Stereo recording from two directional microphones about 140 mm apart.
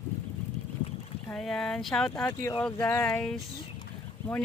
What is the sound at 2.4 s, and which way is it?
Speech, 20° left (ahead or behind).